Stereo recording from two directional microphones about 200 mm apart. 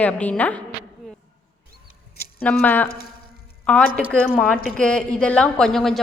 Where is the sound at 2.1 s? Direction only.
50° left (ahead or behind).